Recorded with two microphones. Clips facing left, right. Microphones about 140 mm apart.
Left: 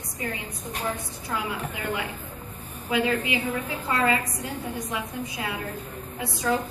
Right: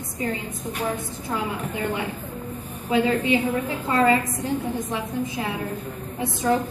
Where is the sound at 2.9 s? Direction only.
30° right (ahead or behind).